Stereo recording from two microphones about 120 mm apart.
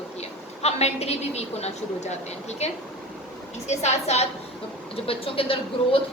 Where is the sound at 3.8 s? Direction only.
65° left (ahead or behind).